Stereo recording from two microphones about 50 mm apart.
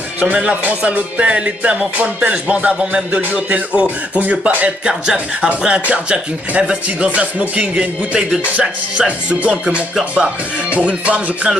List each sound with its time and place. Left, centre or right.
0.4 s music: right
4.8 s speech: centre
5.6 s music: right